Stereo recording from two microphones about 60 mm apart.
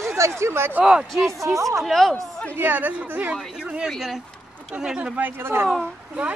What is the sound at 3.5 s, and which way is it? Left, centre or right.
Speech, centre.